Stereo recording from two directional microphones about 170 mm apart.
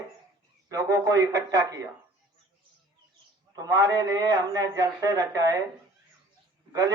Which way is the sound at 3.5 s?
20° right (ahead or behind).